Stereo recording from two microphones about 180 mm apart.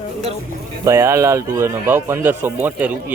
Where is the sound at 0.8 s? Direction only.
15° right (ahead or behind).